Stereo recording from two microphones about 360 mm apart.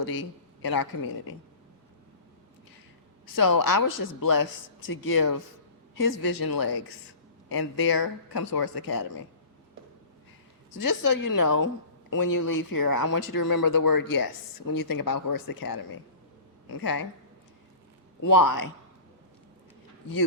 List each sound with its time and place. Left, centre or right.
0.2 s a man's voice: left
3.3 s speech: left
6.0 s speech: left
10.8 s speech: left
16.8 s speech: left
18.2 s speech: left